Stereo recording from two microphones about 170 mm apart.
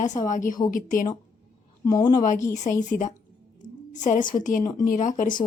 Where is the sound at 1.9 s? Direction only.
20° left (ahead or behind).